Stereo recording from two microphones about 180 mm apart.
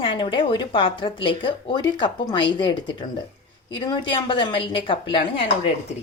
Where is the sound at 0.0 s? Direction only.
30° left (ahead or behind).